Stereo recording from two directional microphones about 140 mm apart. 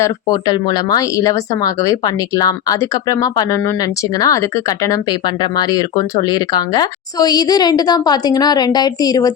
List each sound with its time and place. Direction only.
0.0 s speech: 25° left (ahead or behind)